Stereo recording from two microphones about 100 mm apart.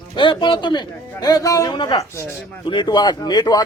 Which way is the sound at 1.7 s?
55° left (ahead or behind).